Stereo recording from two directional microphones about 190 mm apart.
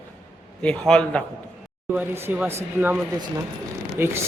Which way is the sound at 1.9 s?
10° right (ahead or behind).